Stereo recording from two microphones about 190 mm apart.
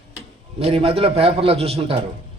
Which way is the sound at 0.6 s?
30° right (ahead or behind).